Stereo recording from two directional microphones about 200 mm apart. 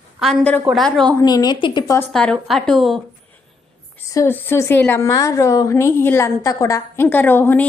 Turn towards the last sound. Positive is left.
turn(degrees=10)  # may be behind; listen again after turning